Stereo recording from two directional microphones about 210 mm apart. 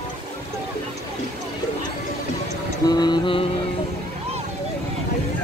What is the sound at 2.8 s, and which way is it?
Mantra, 20° left (ahead or behind).